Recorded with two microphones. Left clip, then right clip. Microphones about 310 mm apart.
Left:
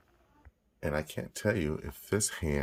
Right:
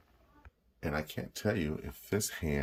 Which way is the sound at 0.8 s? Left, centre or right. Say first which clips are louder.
Left 3 dB; centre.